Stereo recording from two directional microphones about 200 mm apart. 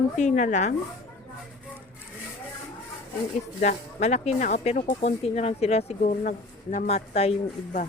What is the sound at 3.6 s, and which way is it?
Speech, 35° left (ahead or behind).